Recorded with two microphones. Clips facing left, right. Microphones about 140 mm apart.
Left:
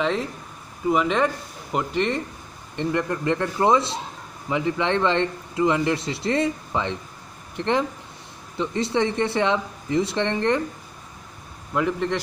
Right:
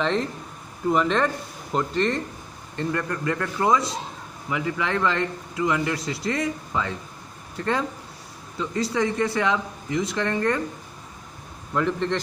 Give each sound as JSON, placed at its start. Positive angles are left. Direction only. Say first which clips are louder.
{"t": 0.0, "sound": "a man's voice", "louder": "even", "side_deg": 10}
{"t": 11.7, "sound": "speech", "louder": "left 1 dB", "side_deg": 10}